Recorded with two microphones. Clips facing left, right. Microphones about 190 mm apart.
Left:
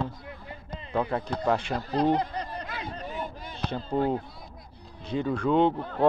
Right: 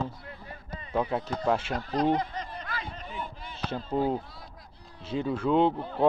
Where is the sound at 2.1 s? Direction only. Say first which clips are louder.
Left 2 dB; 35° left (ahead or behind).